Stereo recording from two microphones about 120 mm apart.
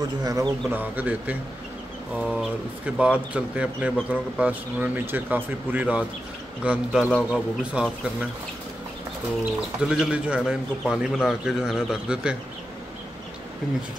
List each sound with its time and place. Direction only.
0.2 s a man's voice: 30° right (ahead or behind)
0.7 s a man's voice: 15° right (ahead or behind)
9.8 s a man's voice: 5° right (ahead or behind)